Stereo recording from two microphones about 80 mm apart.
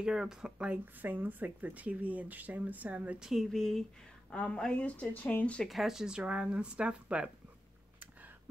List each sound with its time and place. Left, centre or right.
0.0 s speech: centre
3.2 s speech: centre
5.7 s speech: centre